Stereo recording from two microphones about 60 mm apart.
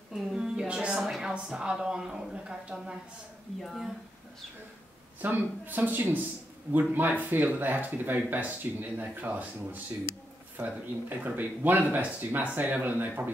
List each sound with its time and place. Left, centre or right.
0.1 s a sound: centre
1.2 s a woman's voice: centre
3.6 s speech: centre
5.2 s speech: right